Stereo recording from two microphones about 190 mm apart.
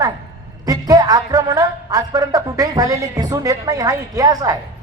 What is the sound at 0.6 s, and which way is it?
A woman's voice, 20° right (ahead or behind).